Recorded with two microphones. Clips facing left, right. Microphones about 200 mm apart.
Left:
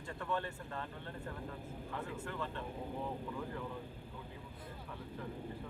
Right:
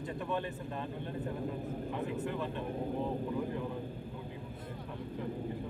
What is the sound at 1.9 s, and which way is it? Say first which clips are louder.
Speech: right 5 dB; 20° right (ahead or behind).